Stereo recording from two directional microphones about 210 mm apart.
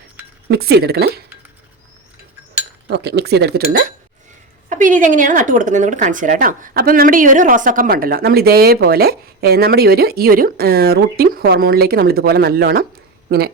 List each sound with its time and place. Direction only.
0.4 s speech: 50° right (ahead or behind)
2.9 s speech: 50° right (ahead or behind)